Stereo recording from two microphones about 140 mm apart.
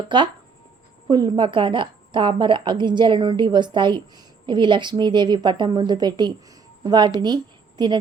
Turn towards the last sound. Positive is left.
turn(degrees=-30)  # may be behind; listen again after turning